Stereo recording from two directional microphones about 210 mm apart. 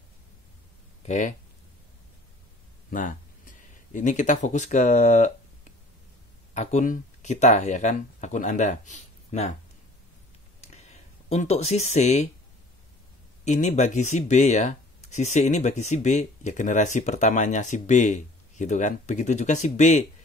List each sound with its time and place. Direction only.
1.0 s speech: 35° left (ahead or behind)
2.9 s speech: 40° left (ahead or behind)
6.5 s speech: 35° left (ahead or behind)
10.6 s a sound: 30° left (ahead or behind)
13.5 s speech: 35° left (ahead or behind)